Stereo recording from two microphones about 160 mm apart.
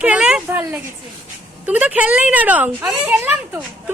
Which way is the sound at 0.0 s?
5° right (ahead or behind).